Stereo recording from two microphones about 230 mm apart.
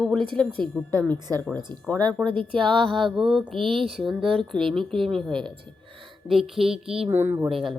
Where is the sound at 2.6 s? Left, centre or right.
Right.